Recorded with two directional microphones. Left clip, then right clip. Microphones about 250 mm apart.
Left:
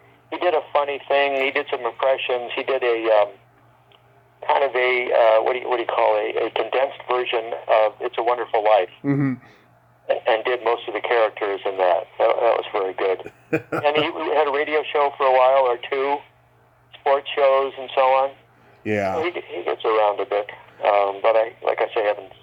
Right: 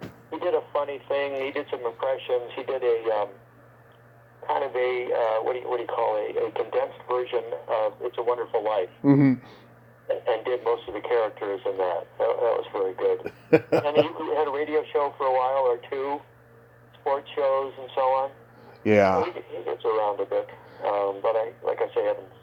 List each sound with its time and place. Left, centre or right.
0.3 s speech: left
4.4 s speech: left
9.0 s speech: centre
10.1 s speech: left
13.2 s speech: centre
13.8 s speech: left
18.9 s speech: centre
19.4 s speech: centre